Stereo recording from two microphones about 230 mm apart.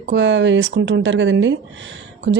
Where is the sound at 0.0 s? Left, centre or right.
Right.